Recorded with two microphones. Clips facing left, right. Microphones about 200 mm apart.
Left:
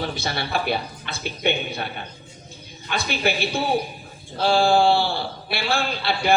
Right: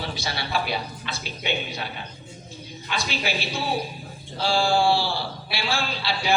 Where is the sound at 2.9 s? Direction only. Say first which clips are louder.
Left 4 dB; 55° left (ahead or behind).